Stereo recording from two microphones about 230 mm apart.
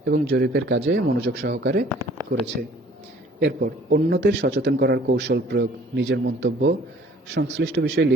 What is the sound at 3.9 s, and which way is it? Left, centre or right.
Speech, right.